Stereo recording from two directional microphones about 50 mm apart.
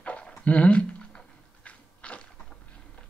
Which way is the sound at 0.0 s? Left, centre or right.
Left.